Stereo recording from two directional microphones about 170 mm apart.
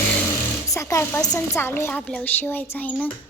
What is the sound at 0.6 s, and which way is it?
Speech, 15° left (ahead or behind).